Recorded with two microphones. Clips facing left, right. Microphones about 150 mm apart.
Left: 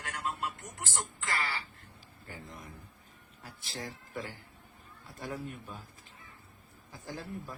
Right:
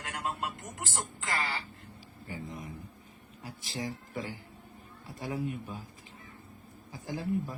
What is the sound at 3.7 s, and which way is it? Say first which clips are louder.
A man's voice: right 4 dB; 10° right (ahead or behind).